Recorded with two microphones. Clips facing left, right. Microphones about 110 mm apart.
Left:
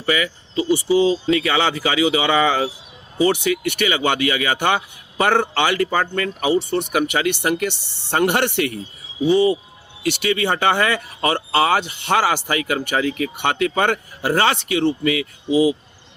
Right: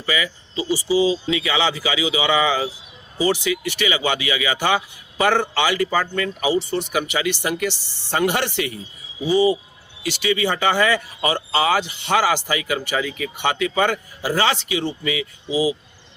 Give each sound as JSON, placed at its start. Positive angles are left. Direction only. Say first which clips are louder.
{"t": 0.0, "sound": "speech", "louder": "left 3 dB", "side_deg": 55}
{"t": 10.0, "sound": "speech", "louder": "left 1 dB", "side_deg": 60}